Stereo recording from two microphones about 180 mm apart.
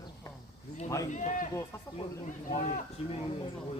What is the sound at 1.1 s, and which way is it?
Speech, 45° left (ahead or behind).